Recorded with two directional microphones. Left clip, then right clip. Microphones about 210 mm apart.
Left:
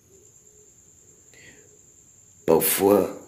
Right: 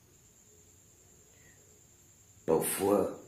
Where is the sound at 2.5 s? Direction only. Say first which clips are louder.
Left 10 dB; 40° left (ahead or behind).